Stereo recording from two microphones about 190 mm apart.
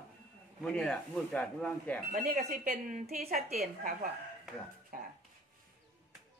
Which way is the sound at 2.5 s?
45° right (ahead or behind).